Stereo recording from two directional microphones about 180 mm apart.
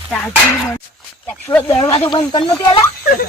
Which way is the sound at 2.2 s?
25° left (ahead or behind).